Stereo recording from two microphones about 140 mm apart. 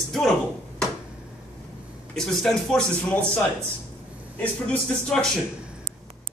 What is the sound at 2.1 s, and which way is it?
A man's voice, centre (ahead or behind).